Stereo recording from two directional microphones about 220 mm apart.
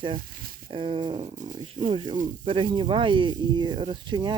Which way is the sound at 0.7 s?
25° right (ahead or behind).